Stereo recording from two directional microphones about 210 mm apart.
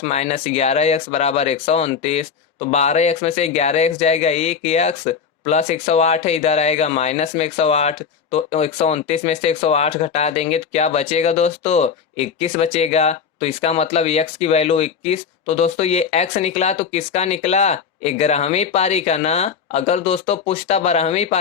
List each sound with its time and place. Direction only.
0.0 s speech: 30° left (ahead or behind)